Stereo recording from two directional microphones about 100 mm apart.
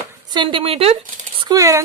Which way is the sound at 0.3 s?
50° right (ahead or behind).